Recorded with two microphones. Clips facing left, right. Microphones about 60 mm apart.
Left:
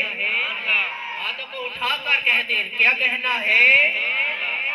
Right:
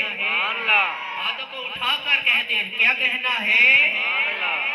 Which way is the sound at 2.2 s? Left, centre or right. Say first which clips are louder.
Left 1 dB; left.